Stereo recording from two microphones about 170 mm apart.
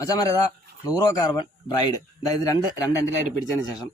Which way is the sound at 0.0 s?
20° left (ahead or behind).